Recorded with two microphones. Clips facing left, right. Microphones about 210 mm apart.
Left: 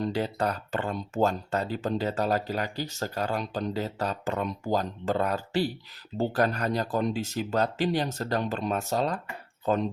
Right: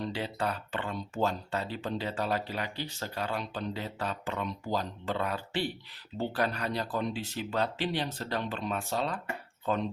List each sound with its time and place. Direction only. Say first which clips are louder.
0.0 s speech: left 5 dB; 40° left (ahead or behind)